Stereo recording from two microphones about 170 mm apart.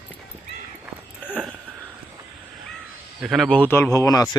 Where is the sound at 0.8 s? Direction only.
10° right (ahead or behind).